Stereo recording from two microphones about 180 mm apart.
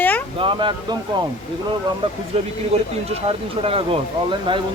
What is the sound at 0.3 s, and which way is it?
Speech, 25° right (ahead or behind).